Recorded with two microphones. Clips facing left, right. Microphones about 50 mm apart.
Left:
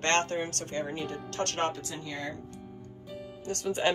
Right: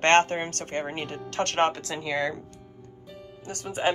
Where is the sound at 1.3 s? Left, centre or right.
Right.